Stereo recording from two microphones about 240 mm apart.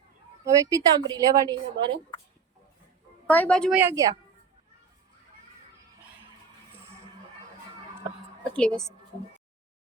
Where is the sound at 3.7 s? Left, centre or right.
Centre.